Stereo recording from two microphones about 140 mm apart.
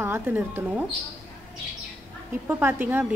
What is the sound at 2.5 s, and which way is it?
Speech, 15° right (ahead or behind).